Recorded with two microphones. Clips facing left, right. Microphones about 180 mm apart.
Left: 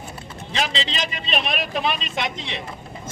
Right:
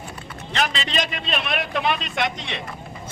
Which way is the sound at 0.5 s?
60° right (ahead or behind).